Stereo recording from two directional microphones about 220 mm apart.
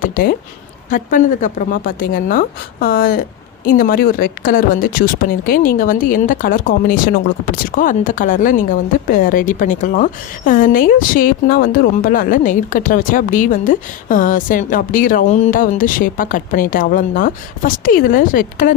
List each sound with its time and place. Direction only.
0.0 s a woman's voice: 40° left (ahead or behind)